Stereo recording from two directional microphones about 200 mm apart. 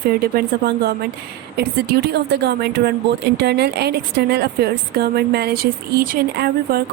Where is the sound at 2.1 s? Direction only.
55° right (ahead or behind).